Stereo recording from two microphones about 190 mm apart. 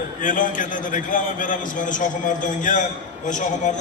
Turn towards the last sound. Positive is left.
turn(degrees=40)  # may be behind; listen again after turning